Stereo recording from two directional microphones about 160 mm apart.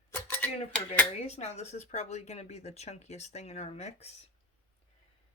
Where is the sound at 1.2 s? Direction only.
45° left (ahead or behind).